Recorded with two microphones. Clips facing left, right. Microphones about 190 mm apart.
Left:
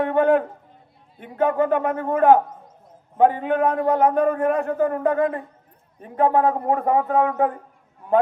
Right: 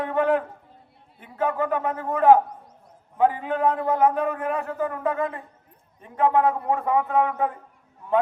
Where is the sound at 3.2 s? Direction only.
40° left (ahead or behind).